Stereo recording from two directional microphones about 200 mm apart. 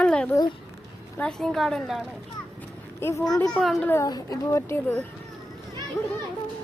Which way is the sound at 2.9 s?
10° left (ahead or behind).